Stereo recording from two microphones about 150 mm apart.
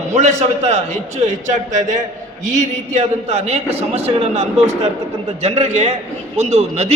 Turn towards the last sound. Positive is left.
turn(degrees=-45)  # may be behind; listen again after turning